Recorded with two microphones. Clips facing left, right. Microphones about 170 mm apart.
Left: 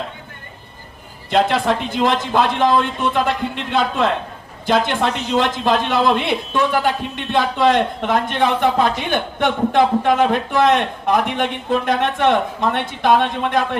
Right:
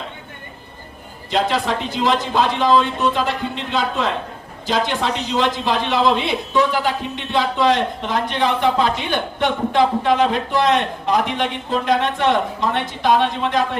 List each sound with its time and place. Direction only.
1.3 s speech: 50° left (ahead or behind)